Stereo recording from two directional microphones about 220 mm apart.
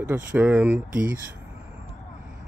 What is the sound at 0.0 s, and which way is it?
Speech, 10° right (ahead or behind).